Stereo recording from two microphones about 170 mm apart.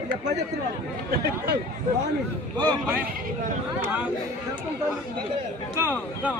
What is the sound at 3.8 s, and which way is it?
Speech, 10° right (ahead or behind).